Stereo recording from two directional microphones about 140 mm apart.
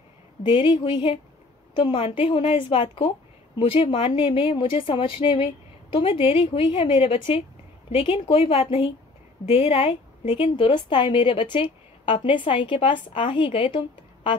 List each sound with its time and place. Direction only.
0.4 s a woman's voice: 35° left (ahead or behind)